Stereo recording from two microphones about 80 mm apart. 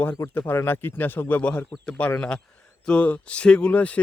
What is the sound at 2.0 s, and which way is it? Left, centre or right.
Speech, centre.